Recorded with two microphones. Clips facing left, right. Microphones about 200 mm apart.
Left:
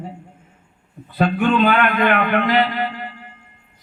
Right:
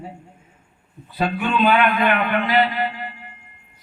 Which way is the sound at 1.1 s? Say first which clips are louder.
Left 4 dB; 60° left (ahead or behind).